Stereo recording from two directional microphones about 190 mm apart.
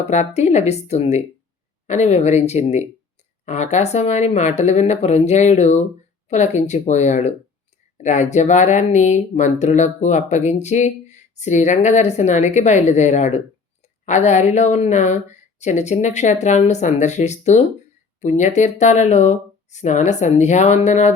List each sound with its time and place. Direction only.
0.0 s speech: 35° left (ahead or behind)